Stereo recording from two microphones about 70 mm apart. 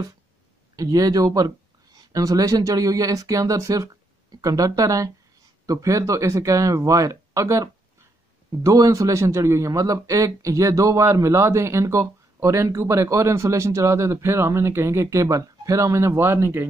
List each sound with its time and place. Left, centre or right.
0.7 s a man's voice: right